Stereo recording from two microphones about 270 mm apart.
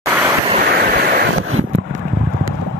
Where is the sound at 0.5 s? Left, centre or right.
Right.